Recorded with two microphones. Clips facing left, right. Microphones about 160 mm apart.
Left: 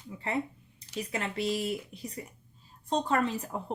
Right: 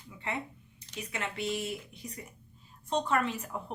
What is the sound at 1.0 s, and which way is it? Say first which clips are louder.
Speech: left 4 dB; 35° left (ahead or behind).